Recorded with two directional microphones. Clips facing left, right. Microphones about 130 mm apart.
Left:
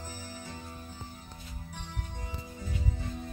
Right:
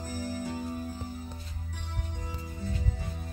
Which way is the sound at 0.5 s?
10° right (ahead or behind).